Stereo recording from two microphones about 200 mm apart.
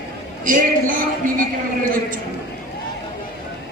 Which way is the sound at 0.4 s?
40° right (ahead or behind).